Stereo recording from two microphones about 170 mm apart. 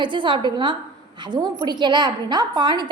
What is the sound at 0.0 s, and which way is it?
A woman's voice, 30° right (ahead or behind).